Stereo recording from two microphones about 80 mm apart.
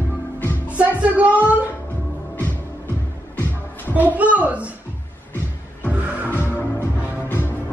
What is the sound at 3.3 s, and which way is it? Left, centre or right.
Music, left.